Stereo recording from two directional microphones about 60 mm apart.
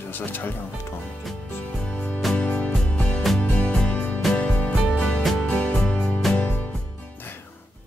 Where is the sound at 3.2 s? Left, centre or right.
Centre.